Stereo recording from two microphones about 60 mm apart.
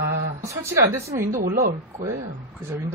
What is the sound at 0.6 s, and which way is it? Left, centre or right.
Speech, right.